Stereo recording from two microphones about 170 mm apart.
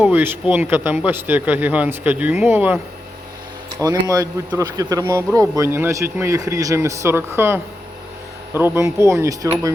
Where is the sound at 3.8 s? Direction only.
20° right (ahead or behind).